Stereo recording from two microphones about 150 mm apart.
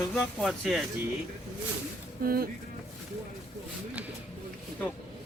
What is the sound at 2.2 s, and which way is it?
Speech, 80° right.